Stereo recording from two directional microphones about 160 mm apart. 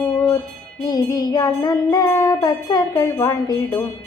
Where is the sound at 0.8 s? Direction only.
25° left (ahead or behind).